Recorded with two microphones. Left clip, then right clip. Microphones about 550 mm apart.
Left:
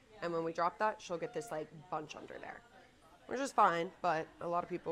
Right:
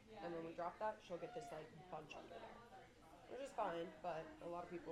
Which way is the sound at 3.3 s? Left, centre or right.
Left.